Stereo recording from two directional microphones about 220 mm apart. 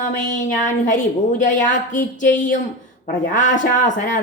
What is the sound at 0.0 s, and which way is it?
Speech, 35° left (ahead or behind).